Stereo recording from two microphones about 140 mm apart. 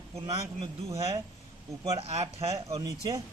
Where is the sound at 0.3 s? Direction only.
25° right (ahead or behind).